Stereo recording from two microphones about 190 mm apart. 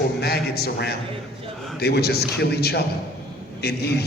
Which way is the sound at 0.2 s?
55° left (ahead or behind).